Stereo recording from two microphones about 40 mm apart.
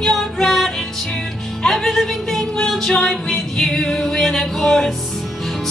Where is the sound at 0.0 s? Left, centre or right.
Centre.